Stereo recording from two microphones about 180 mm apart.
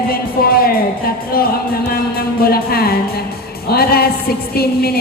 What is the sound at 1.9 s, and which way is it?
A woman's voice, 55° left (ahead or behind).